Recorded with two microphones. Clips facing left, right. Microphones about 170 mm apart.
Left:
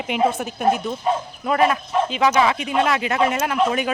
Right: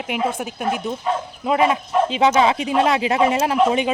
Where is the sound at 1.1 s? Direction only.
20° left (ahead or behind).